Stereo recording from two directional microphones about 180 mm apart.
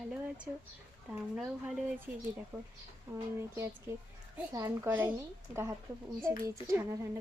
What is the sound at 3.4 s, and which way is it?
Speech, 15° right (ahead or behind).